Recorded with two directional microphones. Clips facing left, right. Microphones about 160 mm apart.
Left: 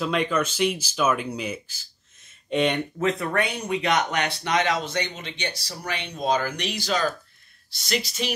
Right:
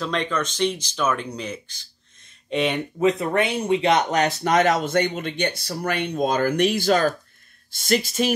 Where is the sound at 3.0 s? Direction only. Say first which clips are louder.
Right 5 dB; 25° right (ahead or behind).